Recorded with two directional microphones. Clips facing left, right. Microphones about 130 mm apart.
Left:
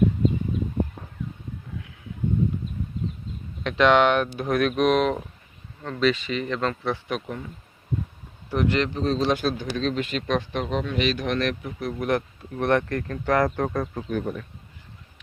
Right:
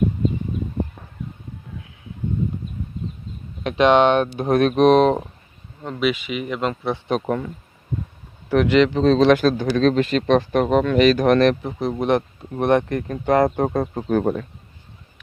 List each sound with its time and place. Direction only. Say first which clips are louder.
3.6 s speech: right 3 dB; 20° right (ahead or behind)
5.8 s speech: right 1 dB; 15° right (ahead or behind)
8.4 s speech: right 8 dB; 90° right
9.6 s a man's voice: right 9 dB; 45° right (ahead or behind)
10.5 s speech: right 9 dB; 50° right (ahead or behind); by 14.0 s 25° right (ahead or behind)
14.1 s speech: right 11 dB; 45° right (ahead or behind)